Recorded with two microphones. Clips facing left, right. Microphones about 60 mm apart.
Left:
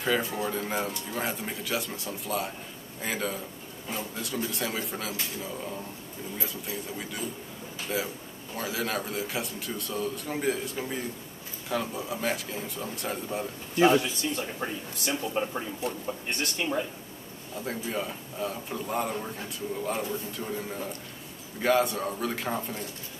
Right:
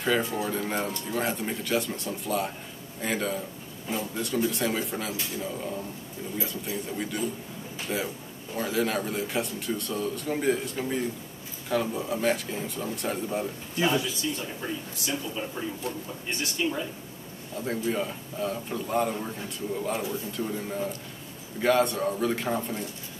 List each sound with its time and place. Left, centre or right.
0.0 s speech: centre
13.7 s a man's voice: left
17.6 s speech: centre